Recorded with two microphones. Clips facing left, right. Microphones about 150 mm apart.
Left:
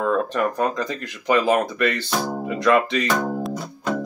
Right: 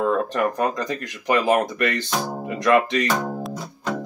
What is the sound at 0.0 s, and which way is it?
Speech, 20° right (ahead or behind).